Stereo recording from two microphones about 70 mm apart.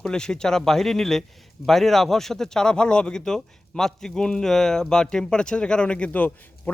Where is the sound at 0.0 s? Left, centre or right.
Centre.